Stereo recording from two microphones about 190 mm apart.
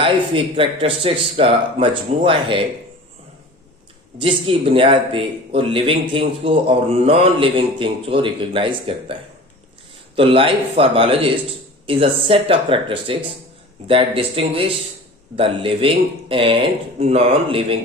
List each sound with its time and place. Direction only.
0.0 s a man's voice: 25° right (ahead or behind)
4.2 s a man's voice: 30° right (ahead or behind)
10.2 s a man's voice: 30° right (ahead or behind)